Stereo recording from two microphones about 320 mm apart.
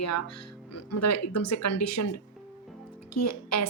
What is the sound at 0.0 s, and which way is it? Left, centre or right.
A woman's voice, left.